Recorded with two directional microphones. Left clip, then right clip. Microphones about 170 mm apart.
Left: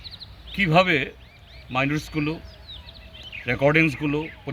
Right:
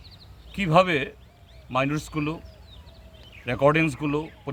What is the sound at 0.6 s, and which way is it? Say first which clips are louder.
Speech: left 1 dB; 15° right (ahead or behind).